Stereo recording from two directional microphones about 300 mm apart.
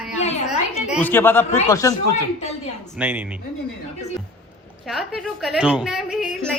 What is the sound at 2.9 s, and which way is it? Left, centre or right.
Speech, centre.